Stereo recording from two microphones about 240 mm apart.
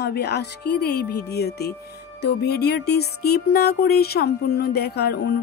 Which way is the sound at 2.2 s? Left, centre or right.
Left.